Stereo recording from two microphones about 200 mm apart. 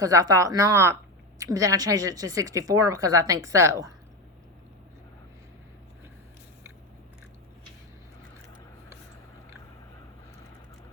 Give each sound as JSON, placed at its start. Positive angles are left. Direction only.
{"t": 0.0, "sound": "a woman's voice", "side_deg": -15}